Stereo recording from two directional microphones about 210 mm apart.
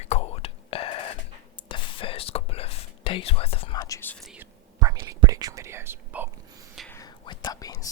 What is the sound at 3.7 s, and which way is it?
Whispering, 15° left (ahead or behind).